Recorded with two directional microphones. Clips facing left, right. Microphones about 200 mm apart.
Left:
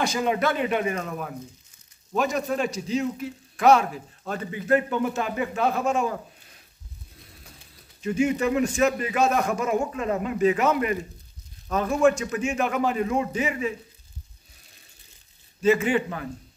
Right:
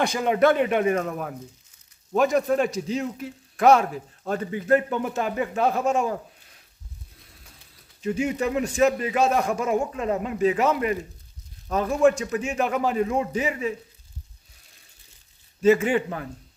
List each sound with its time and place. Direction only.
0.0 s a man's voice: 55° right (ahead or behind)
8.0 s a man's voice: 35° right (ahead or behind)
15.6 s a man's voice: 45° right (ahead or behind)